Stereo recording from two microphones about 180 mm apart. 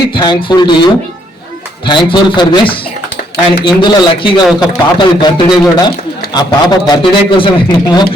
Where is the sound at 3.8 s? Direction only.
25° left (ahead or behind).